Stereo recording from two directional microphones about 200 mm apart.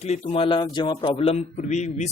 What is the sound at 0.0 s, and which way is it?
A man's voice, 30° left (ahead or behind).